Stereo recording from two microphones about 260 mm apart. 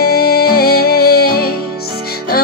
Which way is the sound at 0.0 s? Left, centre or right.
Left.